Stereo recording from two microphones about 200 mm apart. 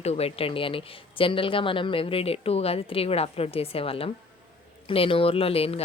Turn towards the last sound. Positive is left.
turn(degrees=30)  # may be behind; listen again after turning